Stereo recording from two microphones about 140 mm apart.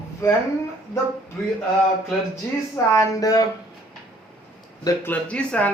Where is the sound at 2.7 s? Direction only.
25° left (ahead or behind).